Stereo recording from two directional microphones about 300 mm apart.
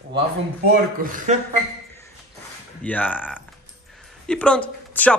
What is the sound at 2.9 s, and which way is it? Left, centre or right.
Speech, centre.